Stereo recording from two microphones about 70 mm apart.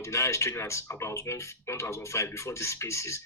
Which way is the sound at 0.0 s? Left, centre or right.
Left.